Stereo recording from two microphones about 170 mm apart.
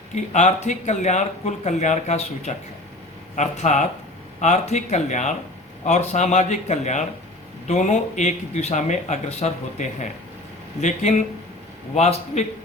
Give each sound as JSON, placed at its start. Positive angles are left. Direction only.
{"t": 0.1, "sound": "a man's voice", "side_deg": 45}